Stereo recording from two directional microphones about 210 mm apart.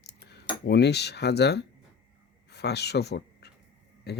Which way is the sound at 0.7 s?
50° left (ahead or behind).